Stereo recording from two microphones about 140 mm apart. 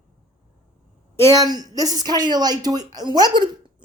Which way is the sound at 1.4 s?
25° right (ahead or behind).